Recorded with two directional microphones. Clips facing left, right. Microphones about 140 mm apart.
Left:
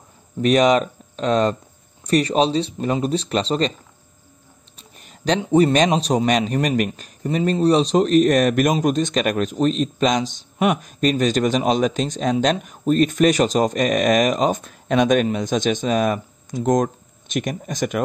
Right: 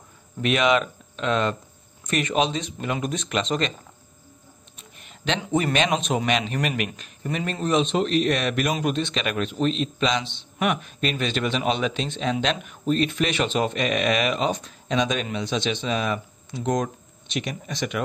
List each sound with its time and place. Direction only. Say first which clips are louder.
0.4 s speech: left 5 dB; 40° left (ahead or behind)
4.7 s a sound: left 3 dB; 40° left (ahead or behind)
5.4 s speech: left 8 dB; 35° left (ahead or behind)